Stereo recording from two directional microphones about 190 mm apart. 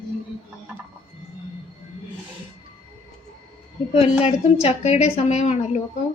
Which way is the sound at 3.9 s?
30° left (ahead or behind).